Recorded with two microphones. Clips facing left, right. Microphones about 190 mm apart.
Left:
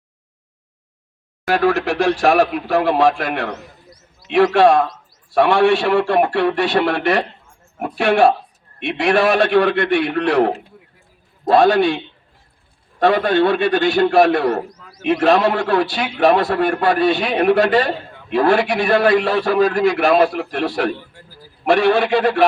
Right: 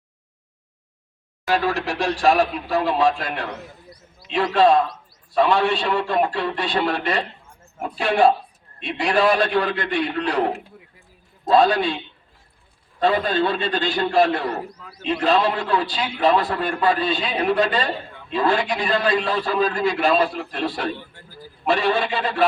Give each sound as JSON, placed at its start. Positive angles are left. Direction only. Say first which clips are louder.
{"t": 1.5, "sound": "a man's voice", "louder": "left 5 dB", "side_deg": 60}
{"t": 4.5, "sound": "a man's voice", "louder": "left 3 dB", "side_deg": 75}
{"t": 11.4, "sound": "a man's voice", "louder": "left 4 dB", "side_deg": 75}
{"t": 13.0, "sound": "a man's voice", "louder": "left 5 dB", "side_deg": 70}